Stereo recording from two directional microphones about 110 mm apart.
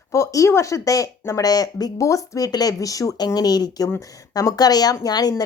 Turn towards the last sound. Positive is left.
turn(degrees=35)  # may be behind; listen again after turning